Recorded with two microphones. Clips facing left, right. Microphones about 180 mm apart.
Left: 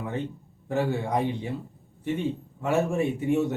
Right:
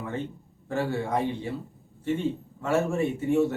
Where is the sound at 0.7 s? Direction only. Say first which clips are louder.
Left 1 dB; 15° left (ahead or behind).